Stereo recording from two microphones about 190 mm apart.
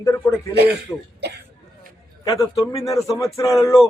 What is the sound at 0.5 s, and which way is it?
Speech, 60° right (ahead or behind).